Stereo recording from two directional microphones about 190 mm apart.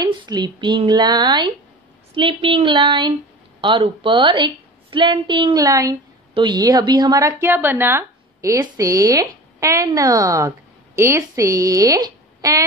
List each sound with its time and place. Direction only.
0.0 s a woman's voice: 25° right (ahead or behind)